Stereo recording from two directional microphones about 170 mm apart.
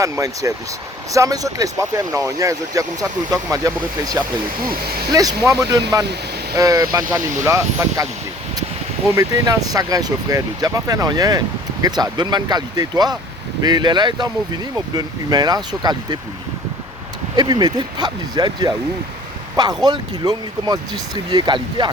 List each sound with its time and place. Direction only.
0.0 s speech: 20° right (ahead or behind)
9.1 s speech: 20° right (ahead or behind)
17.3 s speech: 25° right (ahead or behind)